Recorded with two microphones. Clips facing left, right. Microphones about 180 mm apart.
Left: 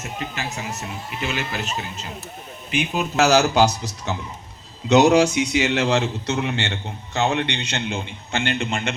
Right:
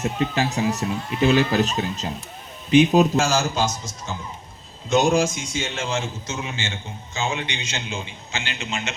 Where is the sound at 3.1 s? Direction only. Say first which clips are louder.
Left 5 dB; 70° left (ahead or behind).